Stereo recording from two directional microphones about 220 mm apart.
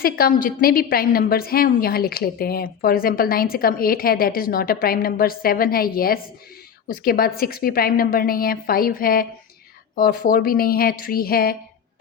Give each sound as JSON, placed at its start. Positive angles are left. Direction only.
{"t": 0.0, "sound": "a woman's voice", "side_deg": 40}